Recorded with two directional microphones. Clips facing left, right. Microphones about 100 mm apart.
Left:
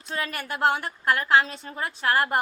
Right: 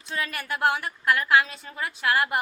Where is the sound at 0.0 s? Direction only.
35° left (ahead or behind).